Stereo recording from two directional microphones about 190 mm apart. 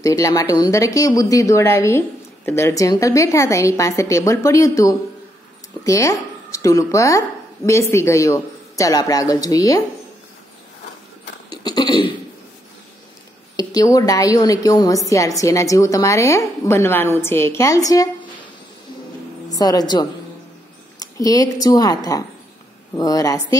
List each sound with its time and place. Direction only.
0.0 s speech: 15° left (ahead or behind)
11.5 s a sound: 20° left (ahead or behind)
13.6 s speech: 20° left (ahead or behind)
19.5 s speech: 20° left (ahead or behind)